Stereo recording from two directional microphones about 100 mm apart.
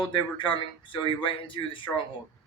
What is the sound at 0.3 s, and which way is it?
Speech, 60° left (ahead or behind).